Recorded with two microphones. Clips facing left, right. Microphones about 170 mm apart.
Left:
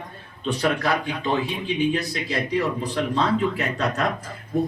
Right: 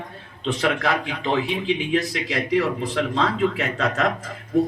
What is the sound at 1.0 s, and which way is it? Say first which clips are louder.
Speech: right 1 dB; 90° right.